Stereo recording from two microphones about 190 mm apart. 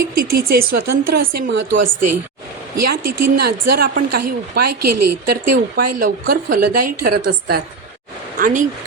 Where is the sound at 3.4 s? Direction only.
55° right (ahead or behind).